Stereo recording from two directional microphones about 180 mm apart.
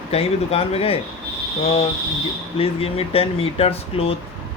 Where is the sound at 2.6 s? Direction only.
30° left (ahead or behind).